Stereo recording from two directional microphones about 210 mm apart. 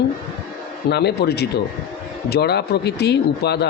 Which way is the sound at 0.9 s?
50° left (ahead or behind).